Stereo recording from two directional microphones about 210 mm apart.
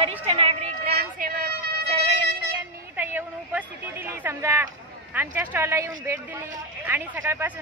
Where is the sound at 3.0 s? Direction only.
10° right (ahead or behind).